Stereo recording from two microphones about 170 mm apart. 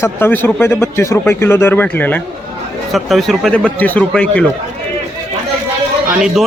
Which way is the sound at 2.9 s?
Centre (ahead or behind).